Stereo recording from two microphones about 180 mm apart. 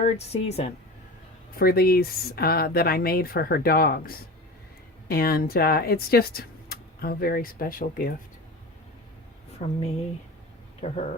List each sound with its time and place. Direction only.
0.0 s speech: 35° left (ahead or behind)
1.5 s speech: 55° left (ahead or behind)
9.6 s speech: 40° left (ahead or behind)
10.8 s speech: 40° left (ahead or behind)